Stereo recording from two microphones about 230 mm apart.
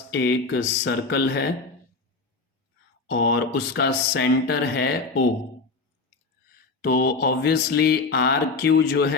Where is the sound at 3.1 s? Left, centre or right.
Left.